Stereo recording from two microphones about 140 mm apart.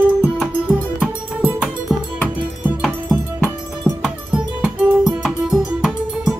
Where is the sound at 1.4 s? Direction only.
5° right (ahead or behind).